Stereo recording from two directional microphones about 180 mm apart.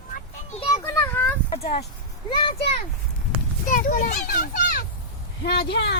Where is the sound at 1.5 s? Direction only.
35° left (ahead or behind).